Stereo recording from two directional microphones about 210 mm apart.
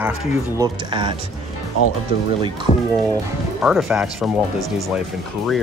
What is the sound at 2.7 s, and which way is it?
Speech, 30° left (ahead or behind).